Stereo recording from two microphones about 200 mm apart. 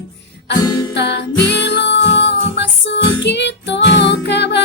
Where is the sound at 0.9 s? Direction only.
60° left (ahead or behind).